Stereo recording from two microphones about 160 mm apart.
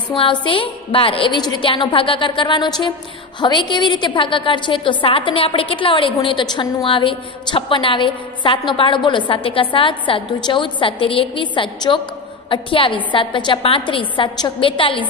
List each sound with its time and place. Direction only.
0.1 s a woman's voice: 35° left (ahead or behind)